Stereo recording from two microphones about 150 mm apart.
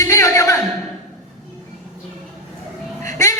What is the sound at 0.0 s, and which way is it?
Music, 20° left (ahead or behind).